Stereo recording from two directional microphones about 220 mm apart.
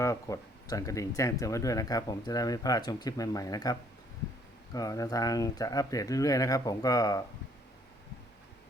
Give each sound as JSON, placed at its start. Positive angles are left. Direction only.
{"t": 0.0, "sound": "speech", "side_deg": 15}